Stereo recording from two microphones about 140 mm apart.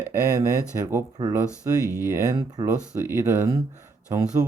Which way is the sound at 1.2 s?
20° right (ahead or behind).